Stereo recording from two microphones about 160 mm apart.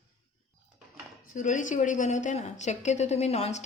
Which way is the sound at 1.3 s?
50° left (ahead or behind).